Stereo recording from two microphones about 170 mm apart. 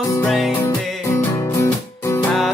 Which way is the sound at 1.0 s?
15° left (ahead or behind).